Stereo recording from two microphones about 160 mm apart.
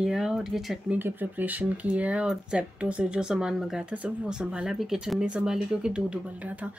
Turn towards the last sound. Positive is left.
turn(degrees=-10)  # may be behind; listen again after turning